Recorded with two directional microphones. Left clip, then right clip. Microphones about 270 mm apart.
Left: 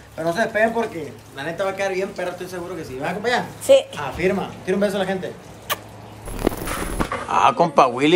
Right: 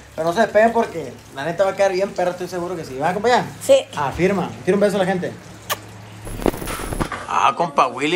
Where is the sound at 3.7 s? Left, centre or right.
Centre.